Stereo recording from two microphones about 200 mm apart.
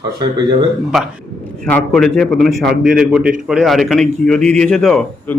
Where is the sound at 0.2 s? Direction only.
20° right (ahead or behind).